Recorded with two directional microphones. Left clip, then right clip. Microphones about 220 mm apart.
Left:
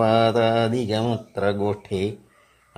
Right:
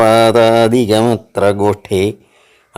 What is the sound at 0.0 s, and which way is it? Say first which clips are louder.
Speech: right 10 dB; 40° right (ahead or behind).